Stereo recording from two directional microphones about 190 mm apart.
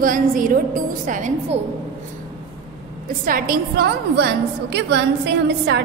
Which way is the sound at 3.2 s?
50° right (ahead or behind).